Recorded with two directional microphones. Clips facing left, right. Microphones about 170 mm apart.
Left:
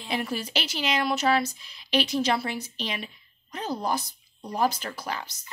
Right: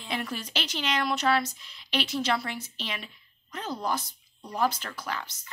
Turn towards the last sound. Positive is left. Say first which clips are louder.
# left 2 dB
turn(degrees=10)  # may be behind; listen again after turning